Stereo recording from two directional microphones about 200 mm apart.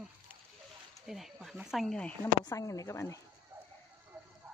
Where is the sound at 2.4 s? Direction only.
15° left (ahead or behind).